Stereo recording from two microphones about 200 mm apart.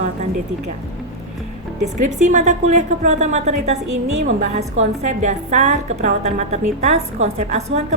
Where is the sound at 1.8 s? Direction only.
35° right (ahead or behind).